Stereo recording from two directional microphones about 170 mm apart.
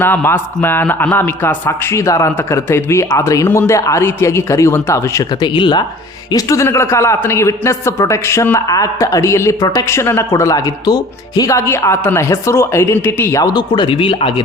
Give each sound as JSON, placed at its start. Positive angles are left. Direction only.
{"t": 0.0, "sound": "a man's voice", "side_deg": 10}
{"t": 5.4, "sound": "a man's voice", "side_deg": 25}